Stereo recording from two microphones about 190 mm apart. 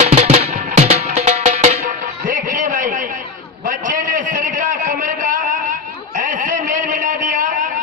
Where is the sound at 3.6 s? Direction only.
45° right (ahead or behind).